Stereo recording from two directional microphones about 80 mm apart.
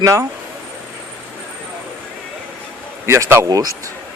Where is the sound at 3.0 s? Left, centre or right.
Right.